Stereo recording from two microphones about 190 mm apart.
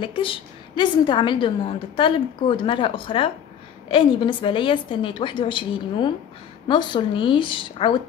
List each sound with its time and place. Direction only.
0.0 s a woman's voice: 25° left (ahead or behind)